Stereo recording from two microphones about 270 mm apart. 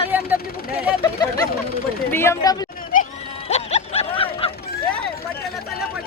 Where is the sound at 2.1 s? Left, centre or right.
Centre.